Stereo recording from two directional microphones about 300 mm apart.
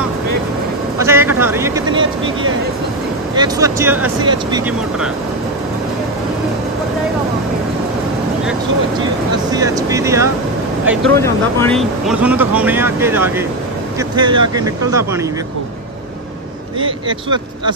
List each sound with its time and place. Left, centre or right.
0.9 s a sound: centre
3.3 s speech: centre
9.5 s speech: centre
11.1 s speech: centre
16.8 s speech: centre